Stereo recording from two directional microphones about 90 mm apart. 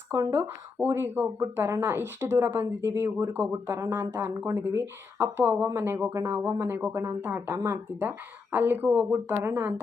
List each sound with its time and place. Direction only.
0.1 s speech: 30° right (ahead or behind)